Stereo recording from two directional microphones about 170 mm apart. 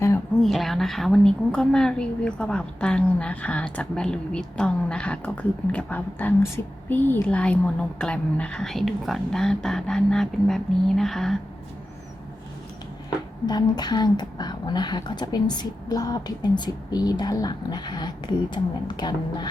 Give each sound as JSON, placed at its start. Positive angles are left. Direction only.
{"t": 0.4, "sound": "a woman's voice", "side_deg": 0}
{"t": 13.5, "sound": "speech", "side_deg": 25}